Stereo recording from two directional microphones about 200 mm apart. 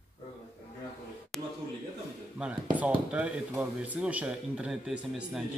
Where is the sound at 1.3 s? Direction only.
Centre (ahead or behind).